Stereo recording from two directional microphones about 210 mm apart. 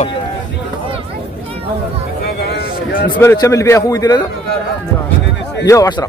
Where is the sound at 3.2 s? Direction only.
15° left (ahead or behind).